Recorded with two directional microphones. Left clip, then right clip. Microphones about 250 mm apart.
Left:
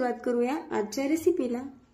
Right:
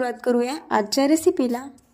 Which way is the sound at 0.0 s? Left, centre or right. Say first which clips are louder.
Right 5 dB; right.